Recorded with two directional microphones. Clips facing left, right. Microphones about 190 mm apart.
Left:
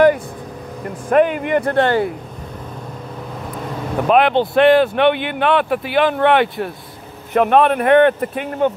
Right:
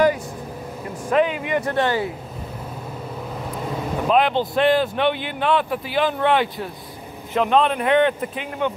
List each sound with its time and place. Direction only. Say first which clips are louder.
1.1 s speech: left 5 dB; 50° left (ahead or behind)
4.1 s speech: left 5 dB; 65° left (ahead or behind)